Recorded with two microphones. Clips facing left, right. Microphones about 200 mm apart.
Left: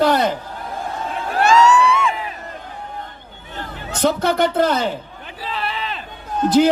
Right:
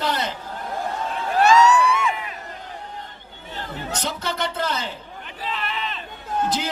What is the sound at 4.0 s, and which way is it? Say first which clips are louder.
A man's voice: left 12 dB; 55° left (ahead or behind).